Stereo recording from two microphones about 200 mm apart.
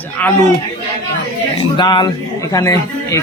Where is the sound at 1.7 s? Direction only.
20° left (ahead or behind).